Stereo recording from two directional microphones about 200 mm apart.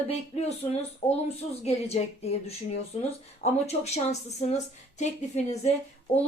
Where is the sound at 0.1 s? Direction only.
30° left (ahead or behind).